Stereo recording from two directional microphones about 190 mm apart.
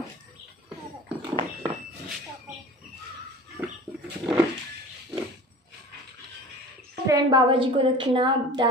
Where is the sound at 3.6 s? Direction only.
15° right (ahead or behind).